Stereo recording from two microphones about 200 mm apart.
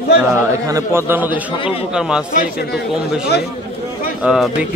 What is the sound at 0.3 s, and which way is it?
A man's voice, 15° right (ahead or behind).